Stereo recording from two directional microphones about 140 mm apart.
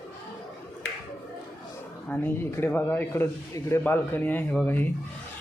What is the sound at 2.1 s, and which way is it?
Speech, 15° left (ahead or behind).